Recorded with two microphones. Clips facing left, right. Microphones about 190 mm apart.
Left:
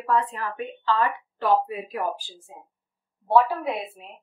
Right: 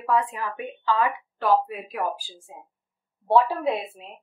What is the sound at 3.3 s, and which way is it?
Speech, 25° right (ahead or behind).